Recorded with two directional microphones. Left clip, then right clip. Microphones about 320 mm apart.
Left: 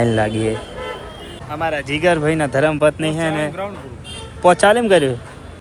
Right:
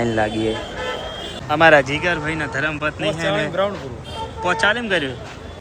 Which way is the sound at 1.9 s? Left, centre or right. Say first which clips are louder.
Left 5 dB; centre.